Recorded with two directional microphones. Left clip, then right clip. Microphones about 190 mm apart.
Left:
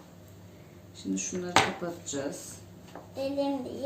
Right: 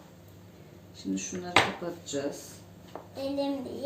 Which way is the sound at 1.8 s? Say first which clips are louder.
Left 1 dB; 35° left (ahead or behind).